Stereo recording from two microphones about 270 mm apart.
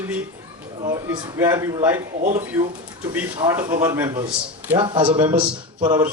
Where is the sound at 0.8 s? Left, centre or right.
Centre.